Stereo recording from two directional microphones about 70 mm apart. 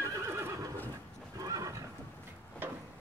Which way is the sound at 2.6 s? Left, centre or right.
Right.